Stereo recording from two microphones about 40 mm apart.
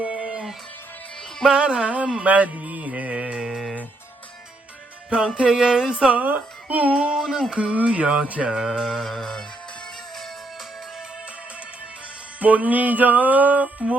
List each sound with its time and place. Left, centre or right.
0.0 s music: right
1.5 s music: right
2.2 s music: right
5.0 s music: right
6.1 s speech: right
6.9 s a sound: centre
7.2 s a sound: centre
7.5 s music: right
8.4 s music: centre
8.8 s music: centre
12.4 s music: right